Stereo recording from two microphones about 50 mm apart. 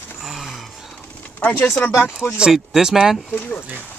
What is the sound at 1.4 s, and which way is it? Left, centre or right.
Speech, left.